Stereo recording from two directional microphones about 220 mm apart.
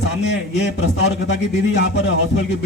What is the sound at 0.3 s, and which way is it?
Speech, 55° left (ahead or behind).